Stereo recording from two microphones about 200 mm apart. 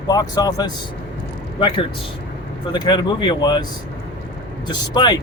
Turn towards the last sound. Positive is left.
turn(degrees=20)  # may be behind; listen again after turning